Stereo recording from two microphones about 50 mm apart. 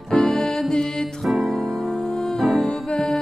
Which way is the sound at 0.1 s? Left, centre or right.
Centre.